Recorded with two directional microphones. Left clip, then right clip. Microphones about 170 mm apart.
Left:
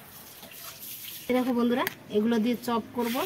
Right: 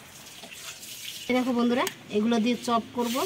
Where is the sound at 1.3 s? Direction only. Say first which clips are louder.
Even; 15° right (ahead or behind).